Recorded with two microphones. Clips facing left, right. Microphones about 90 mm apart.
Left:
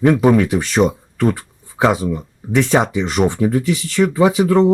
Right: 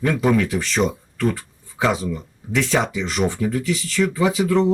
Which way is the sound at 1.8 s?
30° left (ahead or behind).